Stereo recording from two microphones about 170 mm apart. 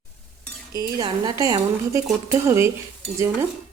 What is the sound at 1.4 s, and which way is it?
A woman's voice, 20° right (ahead or behind).